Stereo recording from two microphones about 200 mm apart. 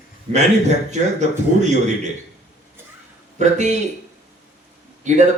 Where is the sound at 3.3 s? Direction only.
35° right (ahead or behind).